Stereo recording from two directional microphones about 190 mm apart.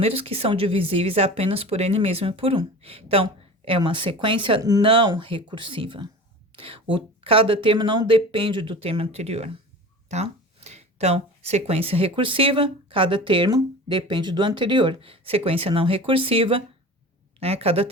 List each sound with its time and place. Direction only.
0.0 s a woman's voice: 30° right (ahead or behind)